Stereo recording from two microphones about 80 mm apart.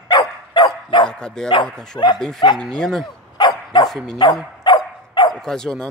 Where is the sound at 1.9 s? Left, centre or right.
Left.